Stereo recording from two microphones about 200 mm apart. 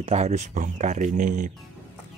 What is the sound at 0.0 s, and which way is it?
Speech, 30° right (ahead or behind).